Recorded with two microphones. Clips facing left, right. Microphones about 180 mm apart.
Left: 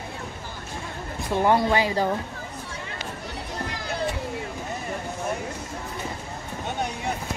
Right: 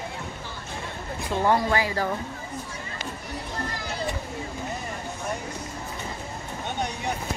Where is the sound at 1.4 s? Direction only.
15° left (ahead or behind).